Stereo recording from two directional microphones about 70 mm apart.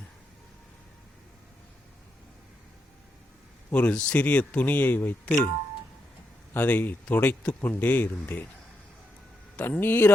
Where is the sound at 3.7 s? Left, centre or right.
Centre.